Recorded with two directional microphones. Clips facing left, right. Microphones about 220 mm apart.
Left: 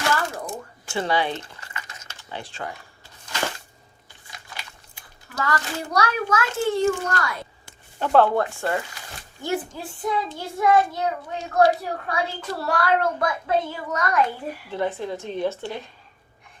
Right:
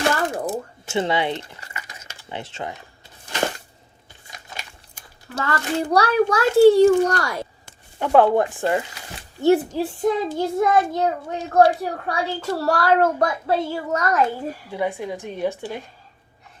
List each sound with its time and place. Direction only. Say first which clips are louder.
0.0 s a sound: right 4 dB; 35° right (ahead or behind)
0.9 s speech: right 2 dB; 20° right (ahead or behind)
4.3 s biting: right 2 dB; 20° right (ahead or behind)
5.4 s a child's voice: right 4 dB; 30° right (ahead or behind)
7.9 s a woman's voice: right 3 dB; 10° right (ahead or behind)
9.7 s a child's voice: right 6 dB; 45° right (ahead or behind)
14.7 s a woman's voice: even; 10° right (ahead or behind)